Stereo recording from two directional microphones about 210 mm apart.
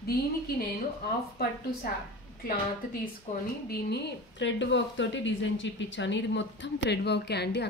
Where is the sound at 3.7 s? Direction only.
50° left (ahead or behind).